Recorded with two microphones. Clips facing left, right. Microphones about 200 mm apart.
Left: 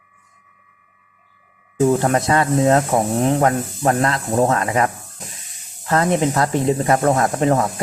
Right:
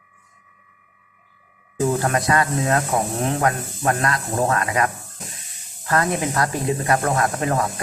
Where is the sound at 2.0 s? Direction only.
25° left (ahead or behind).